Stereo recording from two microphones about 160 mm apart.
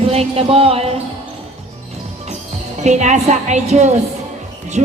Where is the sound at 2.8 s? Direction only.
45° right (ahead or behind).